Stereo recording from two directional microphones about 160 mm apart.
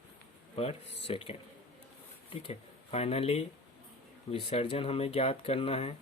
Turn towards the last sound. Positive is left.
turn(degrees=35)  # may be behind; listen again after turning